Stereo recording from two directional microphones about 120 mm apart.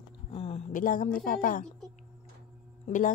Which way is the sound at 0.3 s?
55° left (ahead or behind).